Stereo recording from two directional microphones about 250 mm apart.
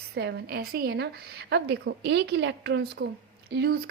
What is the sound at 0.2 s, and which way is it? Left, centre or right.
A woman's voice, right.